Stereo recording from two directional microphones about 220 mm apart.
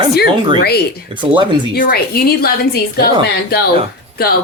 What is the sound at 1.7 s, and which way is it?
A woman's voice, 45° left (ahead or behind).